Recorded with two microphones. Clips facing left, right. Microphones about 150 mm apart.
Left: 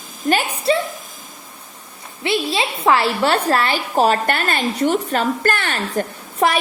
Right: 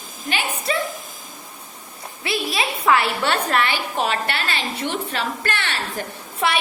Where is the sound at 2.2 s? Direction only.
25° left (ahead or behind).